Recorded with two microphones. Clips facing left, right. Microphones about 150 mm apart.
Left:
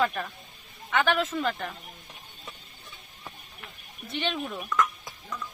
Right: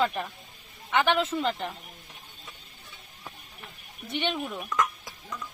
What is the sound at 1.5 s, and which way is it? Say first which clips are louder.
Speech: right 1 dB; 25° right (ahead or behind).